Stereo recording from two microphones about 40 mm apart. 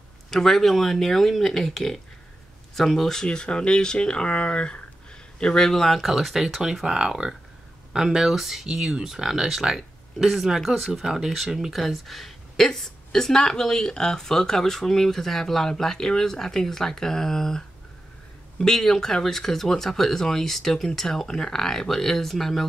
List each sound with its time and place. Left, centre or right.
0.3 s speech: centre
3.3 s a man's voice: left; by 6.0 s centre
6.0 s speech: centre